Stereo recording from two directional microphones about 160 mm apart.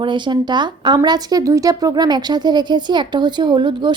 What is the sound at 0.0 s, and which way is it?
A woman's voice, 30° right (ahead or behind).